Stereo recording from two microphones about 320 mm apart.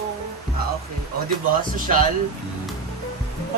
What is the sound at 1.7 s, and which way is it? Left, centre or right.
Speech, right.